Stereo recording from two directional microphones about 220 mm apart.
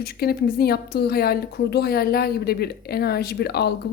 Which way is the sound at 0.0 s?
45° left (ahead or behind).